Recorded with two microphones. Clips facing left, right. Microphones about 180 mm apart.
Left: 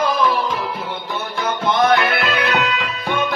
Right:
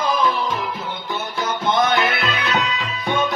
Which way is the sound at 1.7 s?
60° left (ahead or behind).